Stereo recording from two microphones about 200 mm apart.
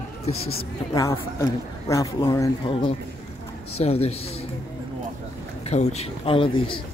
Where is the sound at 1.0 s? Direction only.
15° left (ahead or behind); by 4.1 s 30° left (ahead or behind).